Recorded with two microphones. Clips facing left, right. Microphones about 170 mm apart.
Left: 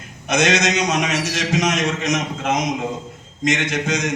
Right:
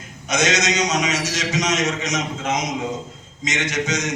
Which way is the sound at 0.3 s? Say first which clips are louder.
Left 3 dB; 55° left (ahead or behind).